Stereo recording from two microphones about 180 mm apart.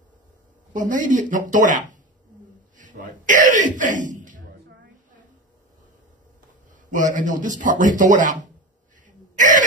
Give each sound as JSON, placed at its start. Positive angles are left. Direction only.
{"t": 0.7, "sound": "speech", "side_deg": -45}
{"t": 6.9, "sound": "speech", "side_deg": -45}
{"t": 9.0, "sound": "throat clearing", "side_deg": -45}